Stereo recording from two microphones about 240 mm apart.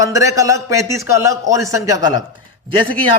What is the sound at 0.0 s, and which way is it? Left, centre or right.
A man's voice, centre.